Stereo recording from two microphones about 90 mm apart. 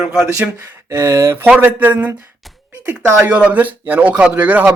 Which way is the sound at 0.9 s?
30° right (ahead or behind).